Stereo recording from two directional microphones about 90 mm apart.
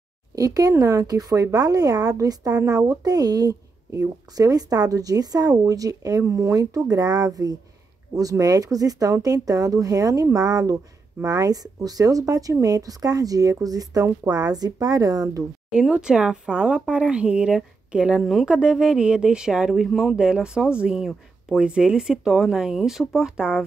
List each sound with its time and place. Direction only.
0.4 s speech: 40° right (ahead or behind)
15.7 s speech: 10° right (ahead or behind)
18.2 s speech: centre (ahead or behind)